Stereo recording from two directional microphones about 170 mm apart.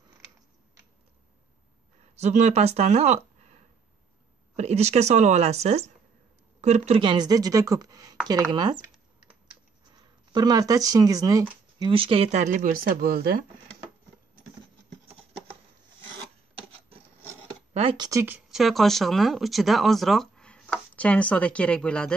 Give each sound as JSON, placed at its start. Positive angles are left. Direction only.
{"t": 2.1, "sound": "speech", "side_deg": -40}
{"t": 4.6, "sound": "speech", "side_deg": -40}
{"t": 10.3, "sound": "speech", "side_deg": -25}
{"t": 17.7, "sound": "speech", "side_deg": -30}
{"t": 18.2, "sound": "speech", "side_deg": -5}